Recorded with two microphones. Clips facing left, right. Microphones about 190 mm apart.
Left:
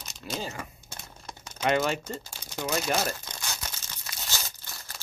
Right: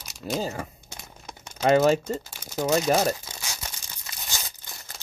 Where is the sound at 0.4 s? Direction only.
35° right (ahead or behind).